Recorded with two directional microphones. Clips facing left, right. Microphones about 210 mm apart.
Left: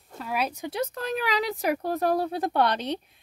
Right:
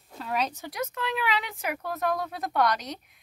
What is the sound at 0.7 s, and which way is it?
Speech, 35° left (ahead or behind).